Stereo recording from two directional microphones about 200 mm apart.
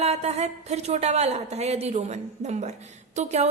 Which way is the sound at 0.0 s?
30° right (ahead or behind).